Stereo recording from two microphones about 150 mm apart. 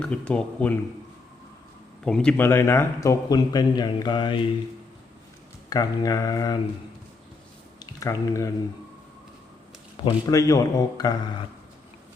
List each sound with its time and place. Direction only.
0.0 s speech: 5° left (ahead or behind)
2.0 s a man's voice: 5° left (ahead or behind); by 4.4 s 30° left (ahead or behind)
5.6 s a man's voice: 25° left (ahead or behind)
7.8 s speech: 20° left (ahead or behind)
10.0 s speech: 35° left (ahead or behind)
10.3 s a man's voice: 20° left (ahead or behind)